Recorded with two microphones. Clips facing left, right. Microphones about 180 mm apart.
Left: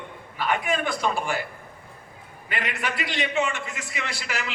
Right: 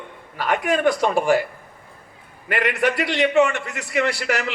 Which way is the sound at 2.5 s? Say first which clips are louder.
Right 9 dB; 70° right (ahead or behind).